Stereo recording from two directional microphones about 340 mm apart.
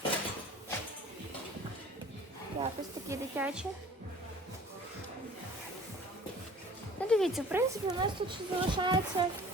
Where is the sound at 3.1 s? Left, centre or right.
Centre.